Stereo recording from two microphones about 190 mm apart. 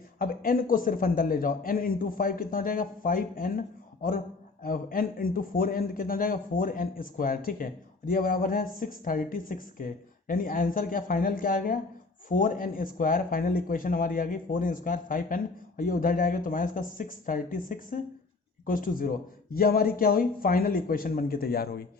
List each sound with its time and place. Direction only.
0.2 s a man's voice: 50° left (ahead or behind)
4.6 s a man's voice: 45° left (ahead or behind)